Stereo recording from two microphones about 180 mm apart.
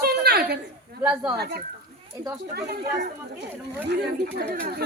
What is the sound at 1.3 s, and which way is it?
Speech, 65° right (ahead or behind).